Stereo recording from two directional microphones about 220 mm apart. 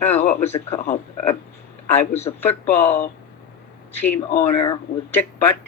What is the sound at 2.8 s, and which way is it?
Speech, 35° left (ahead or behind).